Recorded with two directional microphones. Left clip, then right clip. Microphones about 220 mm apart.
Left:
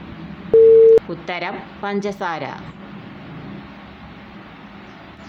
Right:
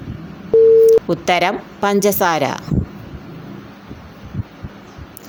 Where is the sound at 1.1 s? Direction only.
45° right (ahead or behind).